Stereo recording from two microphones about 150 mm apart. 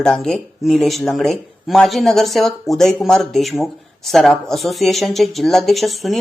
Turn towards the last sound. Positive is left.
turn(degrees=0)  # may be behind; listen again after turning